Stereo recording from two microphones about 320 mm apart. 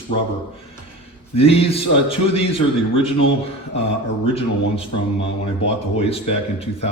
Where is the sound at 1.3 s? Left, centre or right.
Centre.